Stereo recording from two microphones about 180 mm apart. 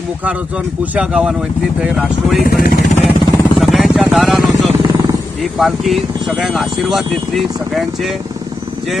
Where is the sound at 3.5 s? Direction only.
Centre (ahead or behind).